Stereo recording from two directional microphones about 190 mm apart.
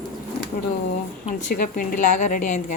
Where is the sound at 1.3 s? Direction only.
40° left (ahead or behind).